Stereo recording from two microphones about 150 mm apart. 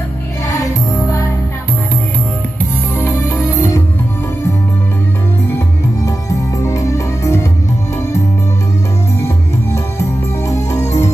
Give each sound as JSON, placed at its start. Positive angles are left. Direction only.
{"t": 0.5, "sound": "music", "side_deg": 20}
{"t": 3.0, "sound": "music", "side_deg": 15}
{"t": 6.6, "sound": "music", "side_deg": 20}
{"t": 10.5, "sound": "music", "side_deg": 20}